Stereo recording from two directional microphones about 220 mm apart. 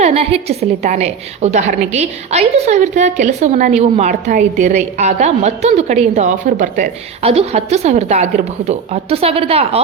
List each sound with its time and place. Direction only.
0.0 s a woman's voice: 30° right (ahead or behind)